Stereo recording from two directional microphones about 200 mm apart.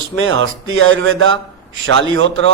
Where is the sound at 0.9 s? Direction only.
65° right (ahead or behind).